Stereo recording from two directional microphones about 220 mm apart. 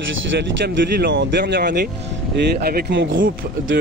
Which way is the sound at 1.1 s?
50° right (ahead or behind).